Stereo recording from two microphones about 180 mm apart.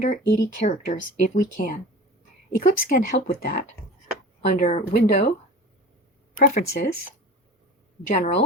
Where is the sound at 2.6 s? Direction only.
50° left (ahead or behind).